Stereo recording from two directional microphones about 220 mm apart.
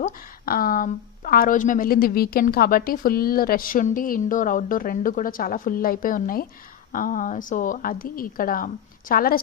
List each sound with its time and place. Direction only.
0.0 s a woman's voice: 40° left (ahead or behind)